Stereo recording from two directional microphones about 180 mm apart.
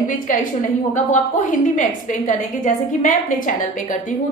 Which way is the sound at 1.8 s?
45° left (ahead or behind).